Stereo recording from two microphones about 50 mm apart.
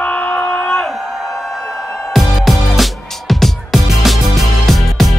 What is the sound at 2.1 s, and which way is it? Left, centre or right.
Music, centre.